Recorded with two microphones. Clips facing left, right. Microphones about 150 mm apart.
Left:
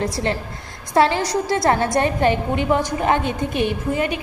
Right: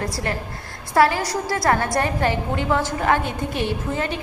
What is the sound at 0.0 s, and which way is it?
A woman's voice, 25° left (ahead or behind).